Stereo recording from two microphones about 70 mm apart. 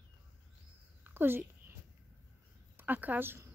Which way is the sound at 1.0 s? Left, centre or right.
Right.